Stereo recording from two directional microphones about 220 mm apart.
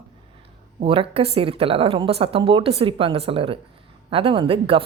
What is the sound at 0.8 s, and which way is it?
A woman's voice, 25° right (ahead or behind).